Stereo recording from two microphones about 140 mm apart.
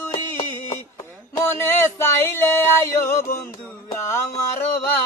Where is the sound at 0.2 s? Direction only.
15° left (ahead or behind).